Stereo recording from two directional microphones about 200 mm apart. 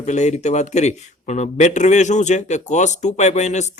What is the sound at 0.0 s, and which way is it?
Speech, 35° left (ahead or behind).